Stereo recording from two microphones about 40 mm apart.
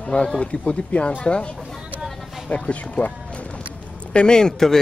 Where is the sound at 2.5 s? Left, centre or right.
Left.